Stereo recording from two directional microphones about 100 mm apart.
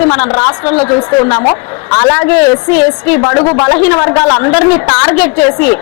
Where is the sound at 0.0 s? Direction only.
20° left (ahead or behind).